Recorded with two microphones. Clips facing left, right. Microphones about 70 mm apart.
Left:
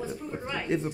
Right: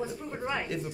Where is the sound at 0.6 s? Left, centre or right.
Left.